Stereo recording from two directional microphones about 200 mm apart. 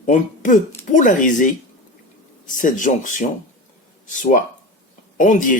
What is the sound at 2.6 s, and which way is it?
Speech, 40° left (ahead or behind).